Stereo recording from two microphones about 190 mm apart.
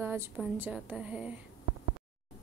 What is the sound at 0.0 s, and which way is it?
A woman's voice, 10° right (ahead or behind).